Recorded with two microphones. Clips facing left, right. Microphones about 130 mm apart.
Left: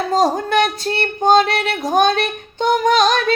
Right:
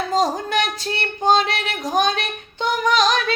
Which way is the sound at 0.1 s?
60° left (ahead or behind).